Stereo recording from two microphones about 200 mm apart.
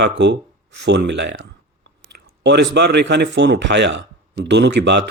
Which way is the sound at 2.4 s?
60° right (ahead or behind).